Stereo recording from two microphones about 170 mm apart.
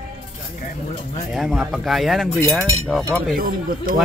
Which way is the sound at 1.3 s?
Centre (ahead or behind).